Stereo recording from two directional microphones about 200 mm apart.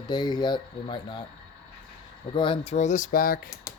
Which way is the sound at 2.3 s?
25° left (ahead or behind).